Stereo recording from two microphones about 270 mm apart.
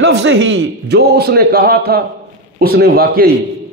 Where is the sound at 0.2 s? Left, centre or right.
Right.